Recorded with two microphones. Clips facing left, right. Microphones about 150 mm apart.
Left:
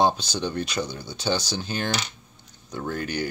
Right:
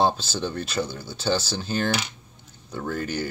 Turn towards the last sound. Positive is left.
turn(degrees=0)  # may be behind; listen again after turning